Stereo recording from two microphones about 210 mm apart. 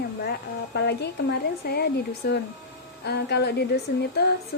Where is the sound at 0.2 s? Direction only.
50° left (ahead or behind).